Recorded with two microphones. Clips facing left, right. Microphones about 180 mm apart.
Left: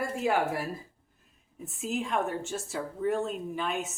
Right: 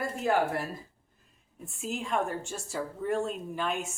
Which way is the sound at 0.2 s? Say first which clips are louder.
Right 1 dB; 5° left (ahead or behind).